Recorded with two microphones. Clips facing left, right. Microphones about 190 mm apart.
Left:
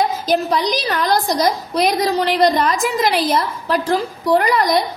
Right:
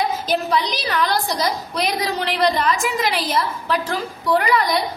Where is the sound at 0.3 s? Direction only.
40° left (ahead or behind).